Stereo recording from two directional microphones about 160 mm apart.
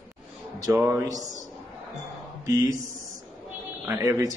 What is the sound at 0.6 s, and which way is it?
Mantra, 20° right (ahead or behind).